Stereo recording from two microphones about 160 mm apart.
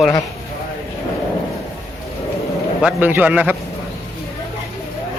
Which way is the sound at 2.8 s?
10° right (ahead or behind).